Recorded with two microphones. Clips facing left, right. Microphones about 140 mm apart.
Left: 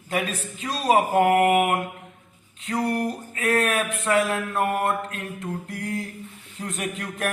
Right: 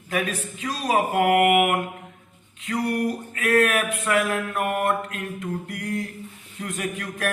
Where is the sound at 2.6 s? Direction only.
30° left (ahead or behind).